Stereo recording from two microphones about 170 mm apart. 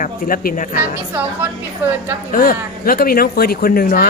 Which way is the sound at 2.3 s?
55° left (ahead or behind).